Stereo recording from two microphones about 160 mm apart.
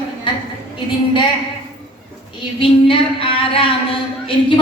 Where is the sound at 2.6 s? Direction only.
35° left (ahead or behind).